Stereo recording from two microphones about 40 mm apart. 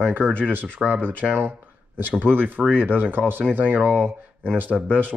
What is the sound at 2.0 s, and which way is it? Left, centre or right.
Speech, right.